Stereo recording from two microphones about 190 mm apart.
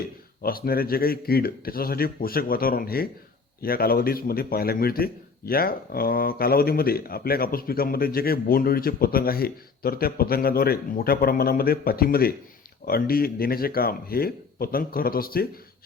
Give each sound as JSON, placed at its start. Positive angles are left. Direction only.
{"t": 0.4, "sound": "a man's voice", "side_deg": 50}